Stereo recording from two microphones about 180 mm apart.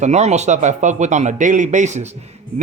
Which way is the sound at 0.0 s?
40° right (ahead or behind).